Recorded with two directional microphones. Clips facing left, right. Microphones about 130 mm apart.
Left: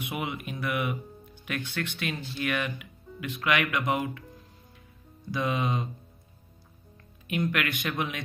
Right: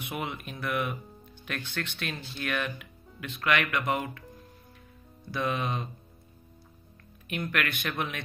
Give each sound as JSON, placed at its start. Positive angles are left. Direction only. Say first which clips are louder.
{"t": 0.0, "sound": "speech", "louder": "left 2 dB", "side_deg": 10}
{"t": 5.3, "sound": "speech", "louder": "left 2 dB", "side_deg": 15}
{"t": 7.2, "sound": "speech", "louder": "left 3 dB", "side_deg": 20}